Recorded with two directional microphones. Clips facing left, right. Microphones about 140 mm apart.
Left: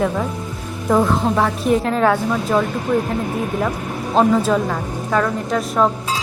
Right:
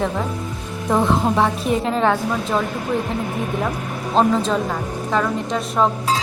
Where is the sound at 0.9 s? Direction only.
Centre (ahead or behind).